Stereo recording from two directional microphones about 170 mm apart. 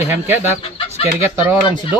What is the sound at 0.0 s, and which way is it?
Speech, 10° right (ahead or behind).